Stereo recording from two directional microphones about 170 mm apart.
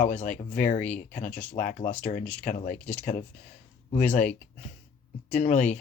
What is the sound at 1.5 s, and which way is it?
Speech, 50° left (ahead or behind).